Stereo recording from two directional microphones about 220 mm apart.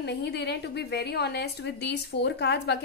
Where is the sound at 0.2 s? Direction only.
50° left (ahead or behind).